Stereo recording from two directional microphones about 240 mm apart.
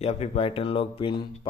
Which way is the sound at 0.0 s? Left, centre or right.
Left.